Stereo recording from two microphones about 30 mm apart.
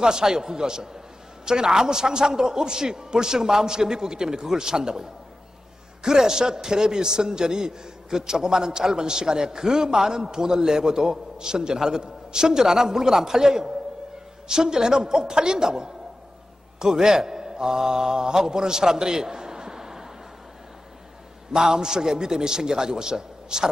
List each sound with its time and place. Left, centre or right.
0.0 s a man's voice: right
6.0 s a man's voice: right
21.5 s a man's voice: right